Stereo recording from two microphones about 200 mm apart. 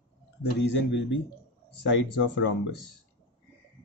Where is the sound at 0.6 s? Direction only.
65° left (ahead or behind).